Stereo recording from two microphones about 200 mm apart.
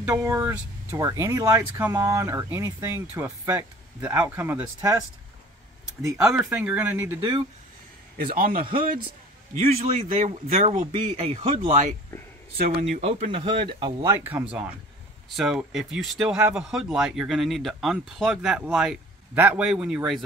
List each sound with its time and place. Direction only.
0.0 s speech: 15° right (ahead or behind)
6.3 s speech: 10° right (ahead or behind)
7.2 s speech: 25° right (ahead or behind)
8.2 s a man's voice: 45° right (ahead or behind)
12.9 s speech: 35° right (ahead or behind); by 20.0 s 5° right (ahead or behind)